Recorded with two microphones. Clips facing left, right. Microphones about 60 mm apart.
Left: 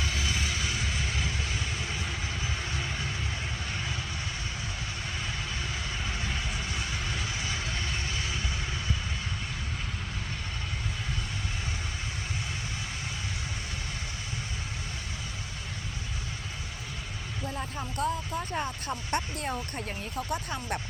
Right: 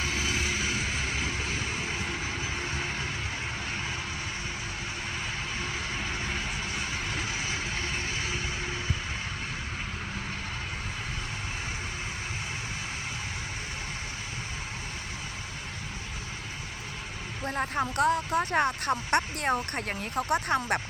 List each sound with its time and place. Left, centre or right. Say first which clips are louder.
0.0 s vehicle: right 2 dB; right
7.2 s vehicle: right 2 dB; right
17.4 s speech: right 7 dB; right